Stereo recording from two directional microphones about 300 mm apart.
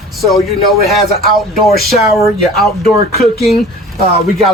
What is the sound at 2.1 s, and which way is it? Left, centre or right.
Speech, centre.